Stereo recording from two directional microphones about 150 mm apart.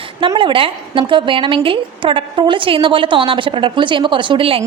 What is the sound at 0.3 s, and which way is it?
A woman's voice, 35° right (ahead or behind).